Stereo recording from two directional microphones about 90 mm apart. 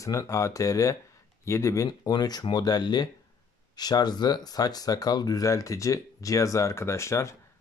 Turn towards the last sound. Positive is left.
turn(degrees=30)  # may be behind; listen again after turning